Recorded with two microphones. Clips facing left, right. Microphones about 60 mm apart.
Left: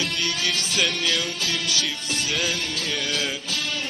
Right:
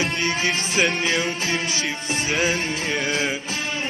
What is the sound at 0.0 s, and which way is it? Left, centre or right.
Music, right.